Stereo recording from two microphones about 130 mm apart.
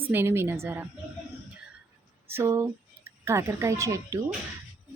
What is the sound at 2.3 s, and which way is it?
Speech, 20° right (ahead or behind).